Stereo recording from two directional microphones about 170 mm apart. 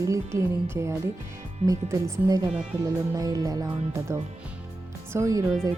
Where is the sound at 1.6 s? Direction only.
20° right (ahead or behind).